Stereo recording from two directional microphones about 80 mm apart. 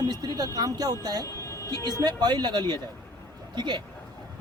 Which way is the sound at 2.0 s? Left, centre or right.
Right.